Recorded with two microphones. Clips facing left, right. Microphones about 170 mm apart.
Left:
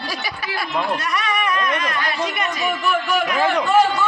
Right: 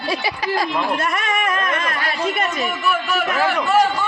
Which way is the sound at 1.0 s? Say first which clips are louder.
Right 1 dB; 50° right (ahead or behind).